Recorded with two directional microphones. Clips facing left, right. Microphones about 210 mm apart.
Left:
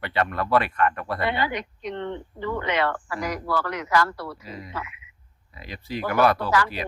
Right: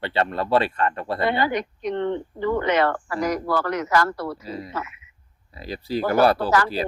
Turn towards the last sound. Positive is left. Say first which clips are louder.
# right 3 dB
turn(degrees=-40)  # may be behind; listen again after turning